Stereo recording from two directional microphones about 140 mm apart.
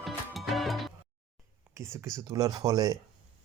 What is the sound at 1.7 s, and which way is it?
Speech, 20° right (ahead or behind).